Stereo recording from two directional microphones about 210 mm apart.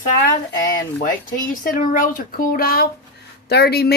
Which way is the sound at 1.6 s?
40° left (ahead or behind).